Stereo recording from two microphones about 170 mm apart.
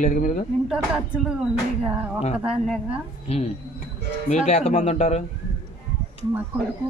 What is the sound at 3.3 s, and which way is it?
Speech, 35° left (ahead or behind).